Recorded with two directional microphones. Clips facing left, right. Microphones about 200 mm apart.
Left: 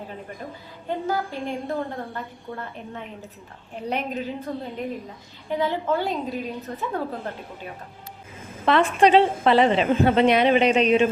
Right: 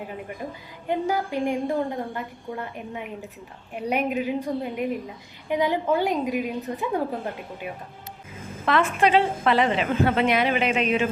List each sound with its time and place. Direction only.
0.9 s a woman's voice: 15° right (ahead or behind)
8.6 s a woman's voice: 30° left (ahead or behind)